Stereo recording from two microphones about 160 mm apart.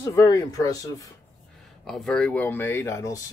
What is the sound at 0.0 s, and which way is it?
Speech, 20° left (ahead or behind).